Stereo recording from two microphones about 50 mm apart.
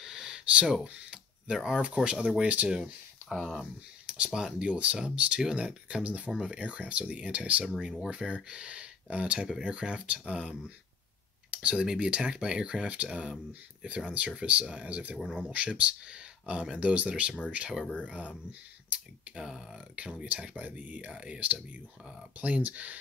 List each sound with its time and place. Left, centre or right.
0.0 s a sound: centre
0.8 s speech: right
2.4 s speech: right
3.3 s speech: centre
4.0 s speech: centre
6.0 s speech: right
11.5 s speech: right
15.1 s speech: centre
15.5 s speech: right
18.9 s speech: centre
20.5 s speech: right